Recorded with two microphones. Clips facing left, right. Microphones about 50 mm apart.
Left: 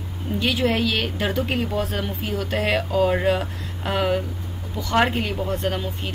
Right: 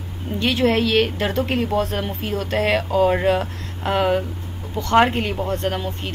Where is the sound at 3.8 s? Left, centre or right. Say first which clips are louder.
Right 3 dB; centre.